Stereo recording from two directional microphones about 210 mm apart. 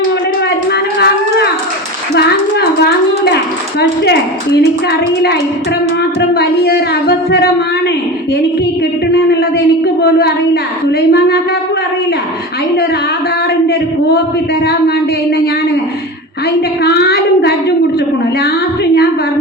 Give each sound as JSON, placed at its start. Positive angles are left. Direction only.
{"t": 0.7, "sound": "cattle", "side_deg": 50}
{"t": 2.1, "sound": "a sound", "side_deg": 50}
{"t": 4.6, "sound": "speech", "side_deg": 50}
{"t": 6.3, "sound": "speech", "side_deg": 50}
{"t": 9.1, "sound": "speech", "side_deg": 50}
{"t": 14.6, "sound": "speech", "side_deg": 50}
{"t": 16.6, "sound": "a woman's voice", "side_deg": 50}